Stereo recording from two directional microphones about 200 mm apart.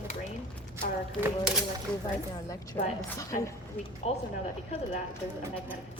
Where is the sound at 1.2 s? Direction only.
5° right (ahead or behind).